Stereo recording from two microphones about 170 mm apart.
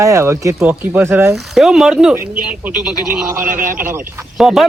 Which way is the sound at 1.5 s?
Centre (ahead or behind).